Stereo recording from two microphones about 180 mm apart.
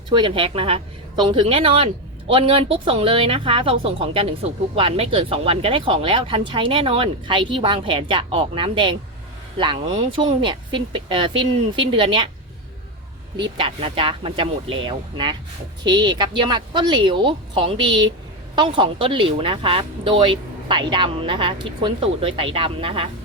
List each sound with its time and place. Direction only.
0.1 s speech: 25° right (ahead or behind)
13.6 s speech: 30° right (ahead or behind)